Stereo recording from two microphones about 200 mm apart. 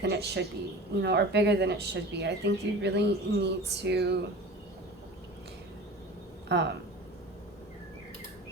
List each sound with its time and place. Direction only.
0.0 s speech: 55° right (ahead or behind)
6.5 s speech: 60° right (ahead or behind)